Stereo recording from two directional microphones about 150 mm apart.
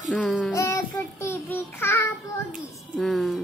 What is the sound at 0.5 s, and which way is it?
Child singing, 20° left (ahead or behind).